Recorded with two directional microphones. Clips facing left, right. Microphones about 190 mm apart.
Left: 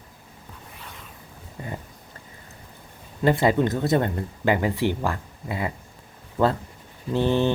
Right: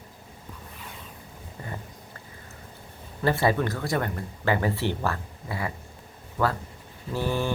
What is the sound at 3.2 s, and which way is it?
Speech, 20° left (ahead or behind).